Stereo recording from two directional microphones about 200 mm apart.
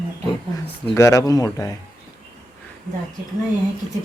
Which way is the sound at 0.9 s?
15° left (ahead or behind).